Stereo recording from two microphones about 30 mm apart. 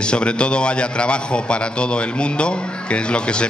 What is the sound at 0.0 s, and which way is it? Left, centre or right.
A man's voice, left.